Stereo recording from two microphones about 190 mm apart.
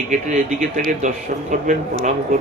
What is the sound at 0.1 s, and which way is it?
A man's voice, 40° right (ahead or behind).